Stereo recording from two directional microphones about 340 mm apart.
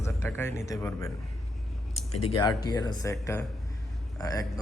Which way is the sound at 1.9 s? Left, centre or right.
Centre.